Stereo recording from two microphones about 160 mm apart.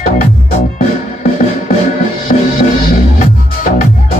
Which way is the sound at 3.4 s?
70° left (ahead or behind).